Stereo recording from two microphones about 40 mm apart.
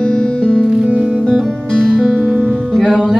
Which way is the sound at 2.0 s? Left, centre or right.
Centre.